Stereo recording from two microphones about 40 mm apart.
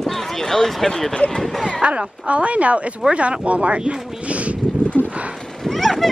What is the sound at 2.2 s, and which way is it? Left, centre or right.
A woman's voice, right.